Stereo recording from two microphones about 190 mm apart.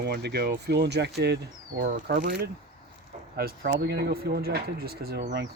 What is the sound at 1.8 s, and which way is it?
Speech, 45° right (ahead or behind).